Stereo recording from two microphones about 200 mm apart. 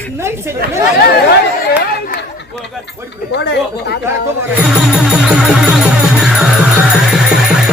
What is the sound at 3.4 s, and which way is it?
Speech, 55° left (ahead or behind).